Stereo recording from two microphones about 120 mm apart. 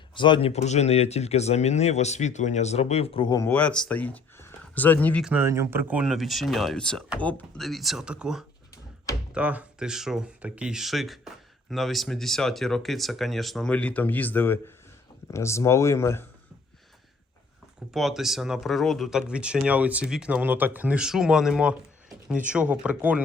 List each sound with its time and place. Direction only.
0.1 s speech: 40° left (ahead or behind)
3.4 s speech: 15° left (ahead or behind)
5.2 s speech: 15° right (ahead or behind)
5.5 s speech: 25° right (ahead or behind)
5.9 s speech: 5° right (ahead or behind); by 7.6 s 10° left (ahead or behind)
7.6 s speech: centre (ahead or behind); by 16.2 s 20° left (ahead or behind)
17.9 s speech: centre (ahead or behind)